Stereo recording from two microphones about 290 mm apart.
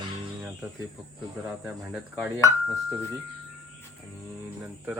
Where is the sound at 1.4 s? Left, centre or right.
Centre.